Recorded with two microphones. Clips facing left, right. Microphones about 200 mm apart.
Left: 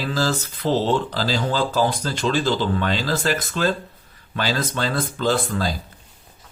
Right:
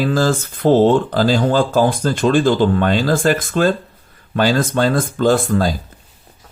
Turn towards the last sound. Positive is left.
turn(degrees=-50)  # may be behind; listen again after turning